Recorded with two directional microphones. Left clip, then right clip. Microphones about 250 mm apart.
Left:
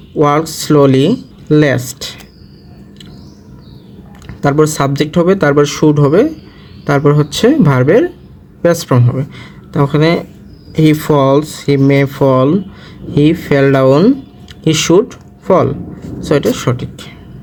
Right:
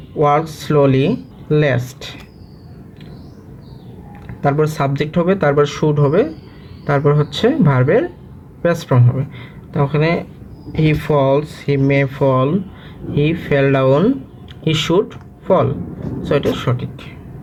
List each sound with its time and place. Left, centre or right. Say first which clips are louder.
0.2 s speech: left 3 dB; left
4.4 s speech: left 5 dB; left